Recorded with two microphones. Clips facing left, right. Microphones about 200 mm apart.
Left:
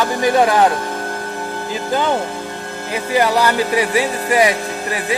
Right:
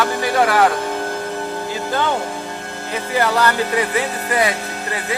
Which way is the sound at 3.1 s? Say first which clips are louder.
Left 2 dB; 10° left (ahead or behind).